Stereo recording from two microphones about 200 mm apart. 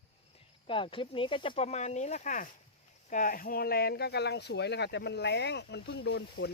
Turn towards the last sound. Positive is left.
turn(degrees=60)  # may be behind; listen again after turning